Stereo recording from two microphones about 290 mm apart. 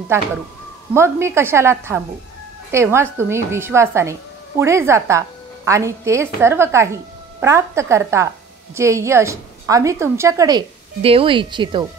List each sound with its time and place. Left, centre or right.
0.1 s a woman's voice: centre